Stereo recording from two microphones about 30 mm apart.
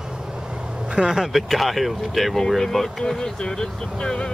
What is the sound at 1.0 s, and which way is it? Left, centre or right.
Speech, centre.